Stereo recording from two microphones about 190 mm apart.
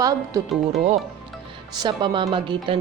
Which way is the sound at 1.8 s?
25° right (ahead or behind).